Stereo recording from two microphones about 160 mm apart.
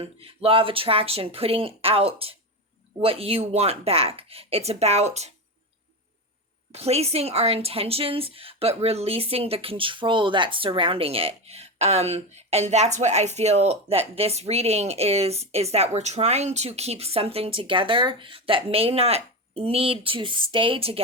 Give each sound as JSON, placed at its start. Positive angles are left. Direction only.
{"t": 0.0, "sound": "a woman's voice", "side_deg": -35}
{"t": 6.7, "sound": "a woman's voice", "side_deg": -40}